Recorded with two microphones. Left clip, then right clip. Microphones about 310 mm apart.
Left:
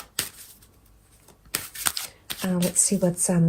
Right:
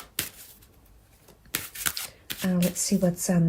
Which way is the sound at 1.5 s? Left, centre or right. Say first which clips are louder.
Left 2 dB; centre.